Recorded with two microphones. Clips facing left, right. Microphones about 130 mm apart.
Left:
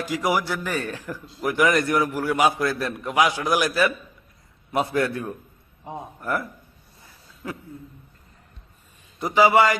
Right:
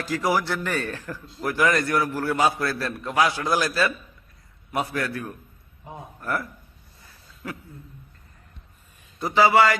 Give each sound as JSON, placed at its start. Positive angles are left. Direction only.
{"t": 0.0, "sound": "a man's voice", "side_deg": 15}
{"t": 9.1, "sound": "a man's voice", "side_deg": 15}